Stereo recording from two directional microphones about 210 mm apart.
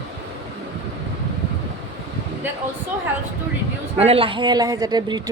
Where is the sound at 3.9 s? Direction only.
30° right (ahead or behind).